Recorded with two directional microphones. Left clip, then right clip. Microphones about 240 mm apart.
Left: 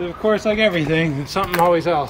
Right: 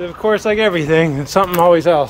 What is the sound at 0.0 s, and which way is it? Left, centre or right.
Speech, centre.